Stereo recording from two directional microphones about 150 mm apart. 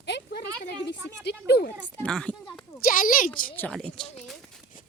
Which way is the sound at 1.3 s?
90° left.